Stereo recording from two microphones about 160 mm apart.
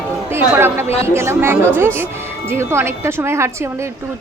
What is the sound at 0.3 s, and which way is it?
Speech, 15° right (ahead or behind).